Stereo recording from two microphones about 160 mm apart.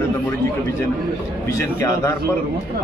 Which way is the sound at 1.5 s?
15° left (ahead or behind).